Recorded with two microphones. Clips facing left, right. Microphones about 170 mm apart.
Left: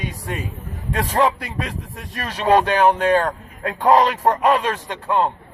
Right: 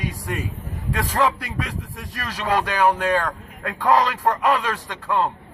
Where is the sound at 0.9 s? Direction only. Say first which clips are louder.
Left 3 dB; 25° left (ahead or behind).